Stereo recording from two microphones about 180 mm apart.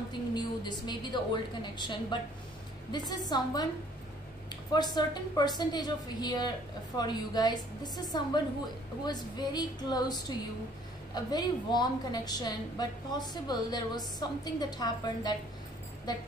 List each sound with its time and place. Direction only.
0.3 s a woman's voice: 25° left (ahead or behind)